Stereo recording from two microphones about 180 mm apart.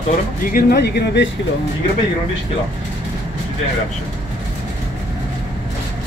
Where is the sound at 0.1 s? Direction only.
55° left (ahead or behind); by 1.3 s 70° left (ahead or behind).